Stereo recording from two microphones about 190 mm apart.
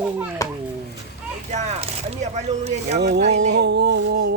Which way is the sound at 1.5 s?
35° right (ahead or behind).